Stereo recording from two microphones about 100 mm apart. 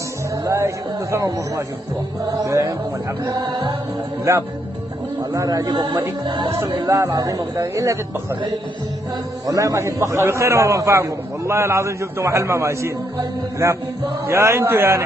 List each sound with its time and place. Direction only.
0.5 s speech: 30° right (ahead or behind)
3.3 s speech: 45° right (ahead or behind)
4.2 s a man's voice: 30° right (ahead or behind)
6.2 s speech: 50° right (ahead or behind)
6.9 s speech: 35° right (ahead or behind)
9.5 s a man's voice: 30° right (ahead or behind)
14.2 s a man's voice: 25° right (ahead or behind)